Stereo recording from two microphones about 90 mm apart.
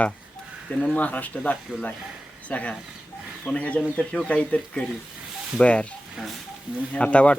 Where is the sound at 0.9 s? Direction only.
15° left (ahead or behind).